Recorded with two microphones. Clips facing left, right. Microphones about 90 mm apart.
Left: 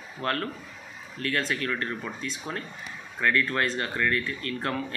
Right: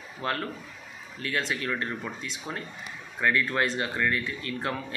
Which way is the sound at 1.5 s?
15° right (ahead or behind).